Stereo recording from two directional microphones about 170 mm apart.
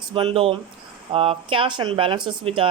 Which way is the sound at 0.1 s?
35° right (ahead or behind).